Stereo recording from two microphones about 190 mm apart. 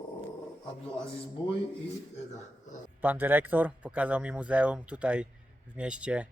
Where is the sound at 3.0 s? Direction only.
10° right (ahead or behind).